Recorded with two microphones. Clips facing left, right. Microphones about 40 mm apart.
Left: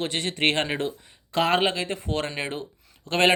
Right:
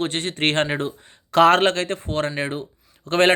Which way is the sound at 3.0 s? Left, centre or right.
Right.